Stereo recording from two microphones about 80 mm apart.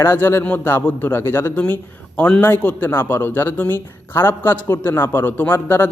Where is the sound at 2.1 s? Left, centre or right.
Centre.